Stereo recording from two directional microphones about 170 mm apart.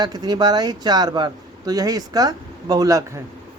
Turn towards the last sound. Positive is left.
turn(degrees=-20)  # may be behind; listen again after turning